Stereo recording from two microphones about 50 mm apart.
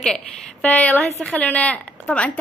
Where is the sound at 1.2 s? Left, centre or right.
Left.